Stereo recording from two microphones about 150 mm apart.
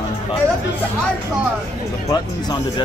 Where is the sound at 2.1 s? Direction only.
25° left (ahead or behind).